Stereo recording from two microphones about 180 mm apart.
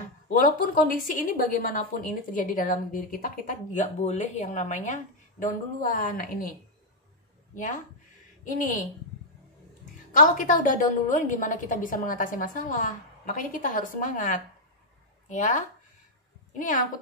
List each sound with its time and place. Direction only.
0.3 s speech: 50° left (ahead or behind)
7.5 s speech: 45° left (ahead or behind)
10.1 s speech: 45° left (ahead or behind)